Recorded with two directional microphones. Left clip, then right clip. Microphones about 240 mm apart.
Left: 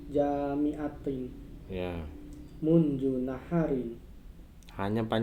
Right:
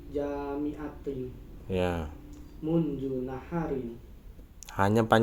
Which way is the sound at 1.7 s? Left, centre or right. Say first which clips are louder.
Right 7 dB; right.